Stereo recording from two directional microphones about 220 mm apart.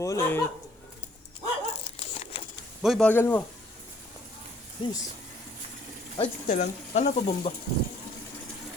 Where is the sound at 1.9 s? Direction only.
25° left (ahead or behind).